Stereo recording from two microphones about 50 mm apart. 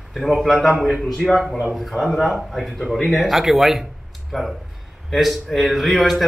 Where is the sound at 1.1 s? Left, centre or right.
Centre.